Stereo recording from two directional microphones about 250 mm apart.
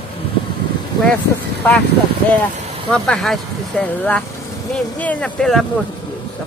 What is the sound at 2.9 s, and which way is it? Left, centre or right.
Speech, centre.